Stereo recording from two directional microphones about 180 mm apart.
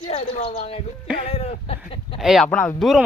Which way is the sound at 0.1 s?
35° left (ahead or behind).